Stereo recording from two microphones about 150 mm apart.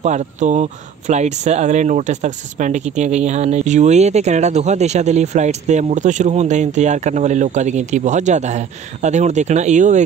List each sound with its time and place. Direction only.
0.0 s speech: 50° right (ahead or behind)